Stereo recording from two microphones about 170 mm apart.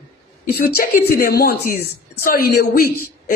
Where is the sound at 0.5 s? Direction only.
70° left (ahead or behind).